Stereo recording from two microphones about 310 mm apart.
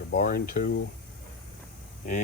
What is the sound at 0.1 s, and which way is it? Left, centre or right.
Speech, left.